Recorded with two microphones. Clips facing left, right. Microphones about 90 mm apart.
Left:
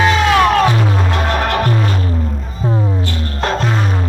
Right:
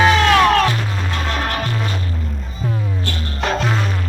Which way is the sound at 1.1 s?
60° left (ahead or behind).